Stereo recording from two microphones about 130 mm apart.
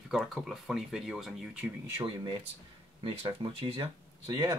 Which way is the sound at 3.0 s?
45° right (ahead or behind).